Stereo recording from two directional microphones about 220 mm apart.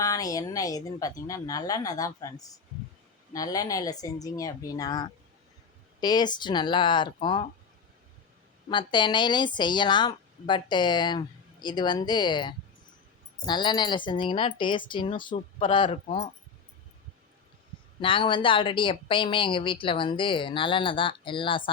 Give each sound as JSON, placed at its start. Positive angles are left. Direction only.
{"t": 0.0, "sound": "a woman's voice", "side_deg": 15}
{"t": 3.3, "sound": "a woman's voice", "side_deg": 15}
{"t": 8.7, "sound": "speech", "side_deg": 20}
{"t": 18.0, "sound": "speech", "side_deg": 25}